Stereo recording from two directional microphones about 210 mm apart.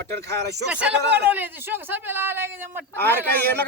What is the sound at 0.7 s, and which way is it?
A man's voice, 5° right (ahead or behind).